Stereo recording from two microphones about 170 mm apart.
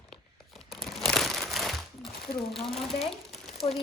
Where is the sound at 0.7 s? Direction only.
Centre (ahead or behind).